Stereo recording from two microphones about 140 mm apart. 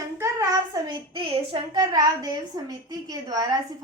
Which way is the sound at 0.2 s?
25° right (ahead or behind).